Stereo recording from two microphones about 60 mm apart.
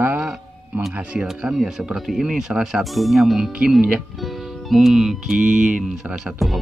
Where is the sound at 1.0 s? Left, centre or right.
Right.